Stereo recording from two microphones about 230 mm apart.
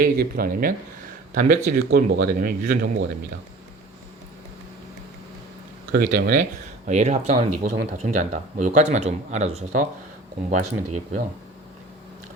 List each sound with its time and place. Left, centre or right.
0.0 s speech: right
5.9 s speech: right
6.8 s speech: right